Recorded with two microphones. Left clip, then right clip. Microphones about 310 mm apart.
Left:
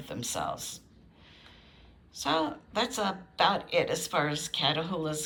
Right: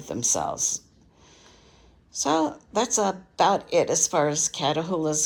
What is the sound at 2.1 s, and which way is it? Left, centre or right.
Speech, right.